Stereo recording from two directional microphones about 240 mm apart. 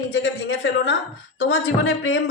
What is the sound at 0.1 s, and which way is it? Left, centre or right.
A woman's voice, left.